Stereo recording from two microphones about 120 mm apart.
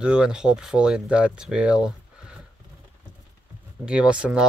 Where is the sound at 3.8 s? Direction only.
10° right (ahead or behind).